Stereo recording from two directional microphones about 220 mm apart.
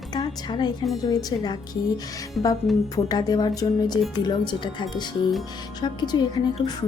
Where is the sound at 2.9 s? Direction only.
15° left (ahead or behind).